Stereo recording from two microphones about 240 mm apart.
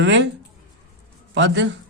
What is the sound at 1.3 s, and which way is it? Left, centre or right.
Speech, right.